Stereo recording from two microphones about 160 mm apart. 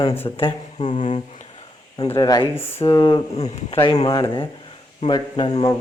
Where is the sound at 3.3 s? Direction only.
40° left (ahead or behind).